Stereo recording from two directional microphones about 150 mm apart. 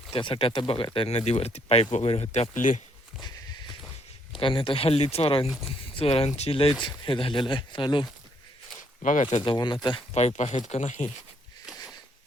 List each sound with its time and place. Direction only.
0.1 s speech: 35° left (ahead or behind)
2.3 s speech: 55° left (ahead or behind)
4.4 s speech: 35° left (ahead or behind)
9.0 s speech: 55° left (ahead or behind)
9.4 s speech: 30° left (ahead or behind)
10.2 s speech: 50° left (ahead or behind)